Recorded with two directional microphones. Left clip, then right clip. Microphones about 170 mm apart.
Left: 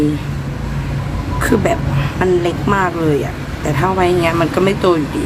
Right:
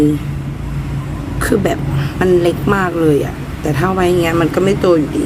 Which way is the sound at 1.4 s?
10° right (ahead or behind).